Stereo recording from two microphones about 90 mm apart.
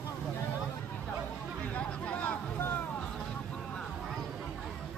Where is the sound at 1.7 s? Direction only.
15° left (ahead or behind).